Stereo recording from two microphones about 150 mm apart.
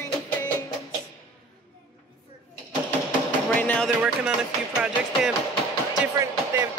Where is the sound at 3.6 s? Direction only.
10° left (ahead or behind).